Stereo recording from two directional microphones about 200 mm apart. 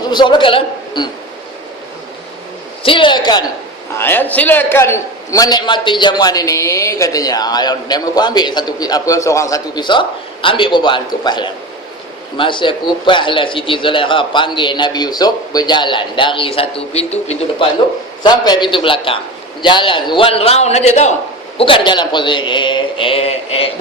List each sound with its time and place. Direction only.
0.1 s a man's voice: 20° left (ahead or behind)
2.8 s a man's voice: 25° left (ahead or behind)
3.9 s a man's voice: 10° left (ahead or behind); by 17.7 s 30° left (ahead or behind)
18.2 s a man's voice: 20° left (ahead or behind)